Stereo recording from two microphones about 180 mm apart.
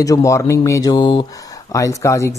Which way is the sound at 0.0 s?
20° left (ahead or behind).